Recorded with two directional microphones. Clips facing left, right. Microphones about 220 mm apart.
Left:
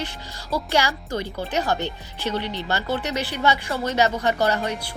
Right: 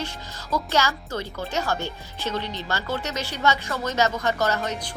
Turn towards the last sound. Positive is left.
turn(degrees=15)  # may be behind; listen again after turning